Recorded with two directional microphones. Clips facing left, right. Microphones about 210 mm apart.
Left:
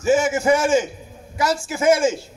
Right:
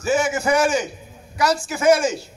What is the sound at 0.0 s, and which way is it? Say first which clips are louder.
A man's voice: left 3 dB; 25° left (ahead or behind).